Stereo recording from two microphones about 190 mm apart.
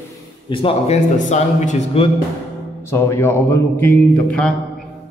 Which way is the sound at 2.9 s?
15° left (ahead or behind).